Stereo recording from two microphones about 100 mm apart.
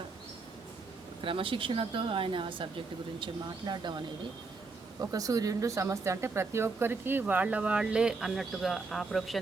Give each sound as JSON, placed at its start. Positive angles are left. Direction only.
{"t": 1.2, "sound": "speech", "side_deg": -60}
{"t": 4.9, "sound": "speech", "side_deg": -35}